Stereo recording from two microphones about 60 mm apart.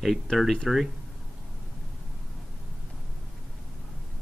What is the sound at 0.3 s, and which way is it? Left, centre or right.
Speech, centre.